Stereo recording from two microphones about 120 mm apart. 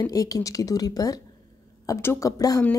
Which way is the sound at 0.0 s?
30° left (ahead or behind).